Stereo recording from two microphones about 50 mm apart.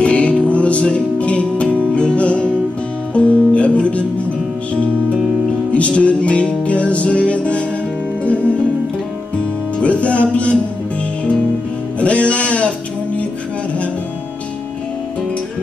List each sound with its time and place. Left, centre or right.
0.0 s music: left
9.8 s music: left
12.0 s music: left